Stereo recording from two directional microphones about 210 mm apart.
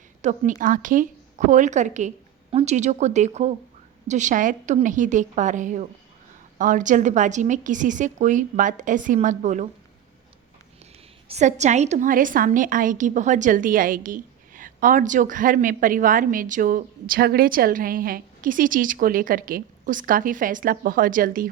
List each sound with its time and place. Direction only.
0.2 s a woman's voice: 35° right (ahead or behind)
11.3 s a woman's voice: 35° right (ahead or behind)